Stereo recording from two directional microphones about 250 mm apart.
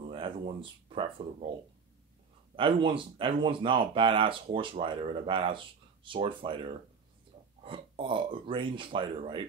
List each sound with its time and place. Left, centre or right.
0.1 s speech: right
2.5 s speech: right